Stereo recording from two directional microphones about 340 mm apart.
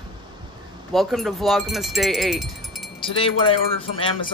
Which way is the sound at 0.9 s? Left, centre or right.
Centre.